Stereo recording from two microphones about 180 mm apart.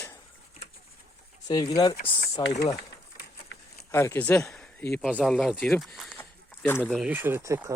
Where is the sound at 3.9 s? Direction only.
15° left (ahead or behind).